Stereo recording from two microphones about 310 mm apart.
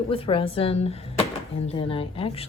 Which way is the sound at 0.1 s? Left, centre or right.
Centre.